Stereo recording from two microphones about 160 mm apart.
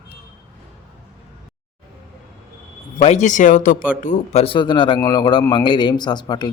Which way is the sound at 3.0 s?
45° left (ahead or behind).